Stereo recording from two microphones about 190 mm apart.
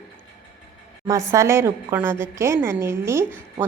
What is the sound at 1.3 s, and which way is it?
A woman's voice, 15° right (ahead or behind).